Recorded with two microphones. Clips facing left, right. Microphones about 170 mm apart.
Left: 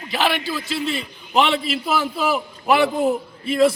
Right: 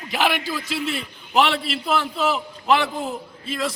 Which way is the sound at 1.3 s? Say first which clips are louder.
Left 1 dB; centre (ahead or behind).